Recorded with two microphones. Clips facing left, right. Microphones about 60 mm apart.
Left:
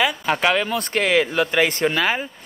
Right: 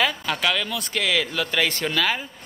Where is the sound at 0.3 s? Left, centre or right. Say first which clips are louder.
Left 5 dB; left.